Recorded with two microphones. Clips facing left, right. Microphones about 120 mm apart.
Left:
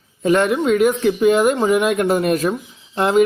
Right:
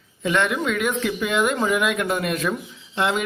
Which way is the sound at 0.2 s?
40° left (ahead or behind).